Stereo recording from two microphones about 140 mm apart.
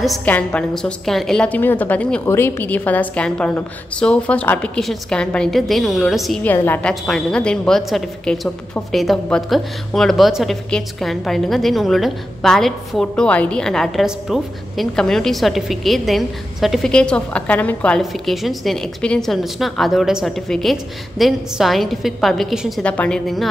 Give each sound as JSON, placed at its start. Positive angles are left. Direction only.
{"t": 0.0, "sound": "a woman's voice", "side_deg": 0}
{"t": 6.4, "sound": "a woman's voice", "side_deg": 15}